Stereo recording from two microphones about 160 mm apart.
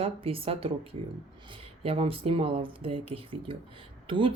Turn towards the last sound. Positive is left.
turn(degrees=-30)  # may be behind; listen again after turning